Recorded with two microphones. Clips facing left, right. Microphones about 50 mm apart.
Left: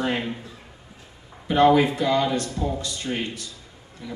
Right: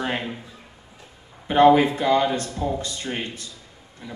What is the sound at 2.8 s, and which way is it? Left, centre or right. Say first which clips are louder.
Speech: left 1 dB; right.